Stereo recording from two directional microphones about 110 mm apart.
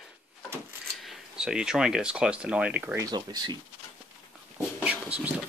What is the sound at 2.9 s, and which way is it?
Speech, 35° right (ahead or behind).